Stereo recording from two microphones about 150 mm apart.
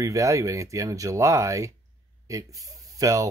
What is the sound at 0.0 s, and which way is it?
Speech, 20° right (ahead or behind).